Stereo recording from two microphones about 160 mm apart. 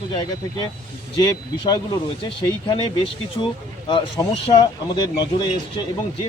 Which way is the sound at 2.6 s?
30° left (ahead or behind).